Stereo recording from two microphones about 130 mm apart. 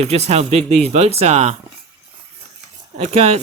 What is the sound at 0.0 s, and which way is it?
Speech, 55° right (ahead or behind).